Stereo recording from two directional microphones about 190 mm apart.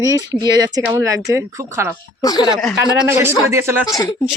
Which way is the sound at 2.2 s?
20° left (ahead or behind).